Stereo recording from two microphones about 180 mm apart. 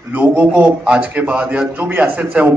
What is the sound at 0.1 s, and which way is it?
A man's voice, 10° right (ahead or behind).